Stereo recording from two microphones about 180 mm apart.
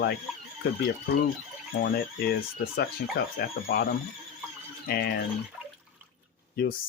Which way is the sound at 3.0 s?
60° left (ahead or behind).